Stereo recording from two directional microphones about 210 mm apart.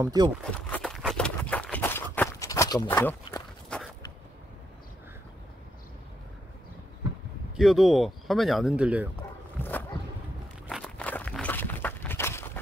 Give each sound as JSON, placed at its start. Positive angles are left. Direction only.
{"t": 0.0, "sound": "speech", "side_deg": -20}
{"t": 0.6, "sound": "a sound", "side_deg": 5}
{"t": 7.5, "sound": "speech", "side_deg": 0}
{"t": 9.6, "sound": "dog", "side_deg": 10}
{"t": 10.7, "sound": "walk", "side_deg": 0}